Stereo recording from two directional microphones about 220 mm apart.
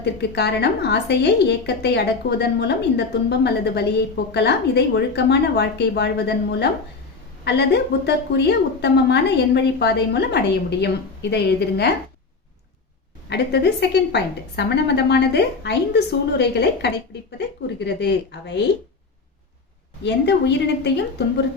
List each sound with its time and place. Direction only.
0.0 s a woman's voice: 50° left (ahead or behind)
13.3 s a woman's voice: 50° left (ahead or behind)
20.0 s a woman's voice: 50° left (ahead or behind)